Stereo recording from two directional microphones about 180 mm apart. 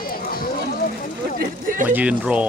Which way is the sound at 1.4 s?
50° right (ahead or behind).